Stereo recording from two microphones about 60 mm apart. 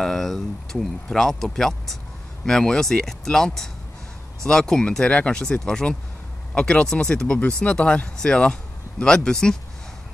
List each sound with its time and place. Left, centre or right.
0.0 s speech: centre